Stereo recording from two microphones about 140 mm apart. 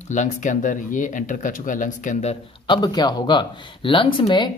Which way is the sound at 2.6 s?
30° left (ahead or behind).